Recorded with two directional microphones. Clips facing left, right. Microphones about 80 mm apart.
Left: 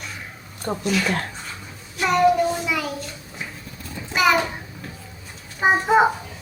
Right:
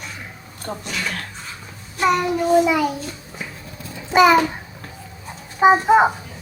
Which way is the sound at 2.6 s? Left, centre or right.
Right.